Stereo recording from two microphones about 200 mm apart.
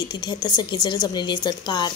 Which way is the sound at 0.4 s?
20° left (ahead or behind).